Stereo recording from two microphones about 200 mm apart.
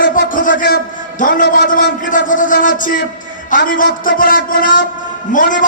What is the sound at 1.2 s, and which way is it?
A man's voice, 45° left (ahead or behind).